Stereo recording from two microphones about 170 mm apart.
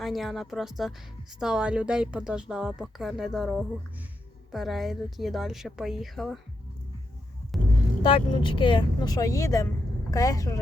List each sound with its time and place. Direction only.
0.0 s a woman's voice: centre (ahead or behind)
8.0 s speech: 30° left (ahead or behind)